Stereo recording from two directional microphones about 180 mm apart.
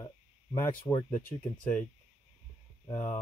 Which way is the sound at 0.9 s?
15° left (ahead or behind).